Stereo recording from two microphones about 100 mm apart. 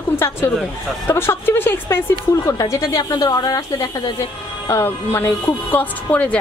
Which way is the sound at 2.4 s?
35° left (ahead or behind).